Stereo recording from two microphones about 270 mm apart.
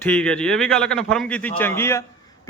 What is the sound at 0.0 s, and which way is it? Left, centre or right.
A man's voice, centre.